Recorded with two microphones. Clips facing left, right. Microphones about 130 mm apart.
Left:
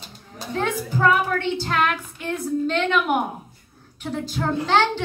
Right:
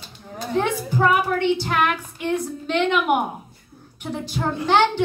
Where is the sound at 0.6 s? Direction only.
15° right (ahead or behind).